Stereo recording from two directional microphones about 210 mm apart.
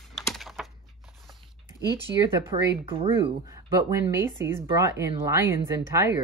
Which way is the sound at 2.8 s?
25° right (ahead or behind).